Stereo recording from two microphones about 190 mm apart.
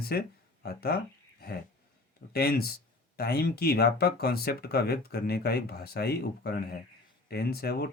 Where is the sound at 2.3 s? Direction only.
55° left (ahead or behind).